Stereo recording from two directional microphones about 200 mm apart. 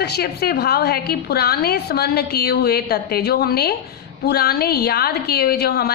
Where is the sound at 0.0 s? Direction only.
55° left (ahead or behind).